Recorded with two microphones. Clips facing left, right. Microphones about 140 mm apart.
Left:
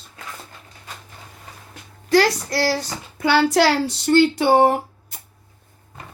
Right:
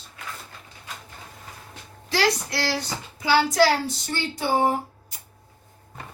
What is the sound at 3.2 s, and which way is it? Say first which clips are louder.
Speech: left 3 dB; 65° left (ahead or behind).